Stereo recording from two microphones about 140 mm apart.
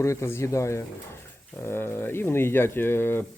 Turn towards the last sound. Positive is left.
turn(degrees=15)  # may be behind; listen again after turning